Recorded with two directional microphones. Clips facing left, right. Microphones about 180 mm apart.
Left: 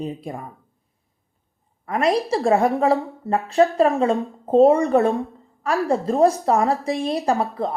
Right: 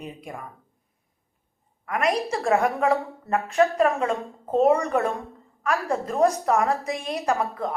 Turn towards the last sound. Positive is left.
turn(degrees=35)  # may be behind; listen again after turning